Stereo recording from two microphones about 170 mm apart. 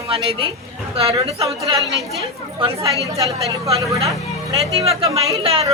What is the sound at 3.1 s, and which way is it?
Speech, 20° right (ahead or behind).